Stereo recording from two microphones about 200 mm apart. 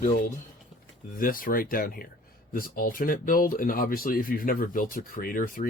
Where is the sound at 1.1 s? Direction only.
45° left (ahead or behind).